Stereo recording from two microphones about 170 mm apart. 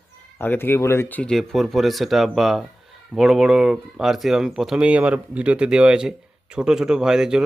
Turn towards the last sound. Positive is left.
turn(degrees=-5)  # may be behind; listen again after turning